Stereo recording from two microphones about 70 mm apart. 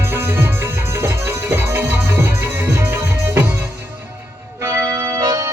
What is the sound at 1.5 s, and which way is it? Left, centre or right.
Music, right.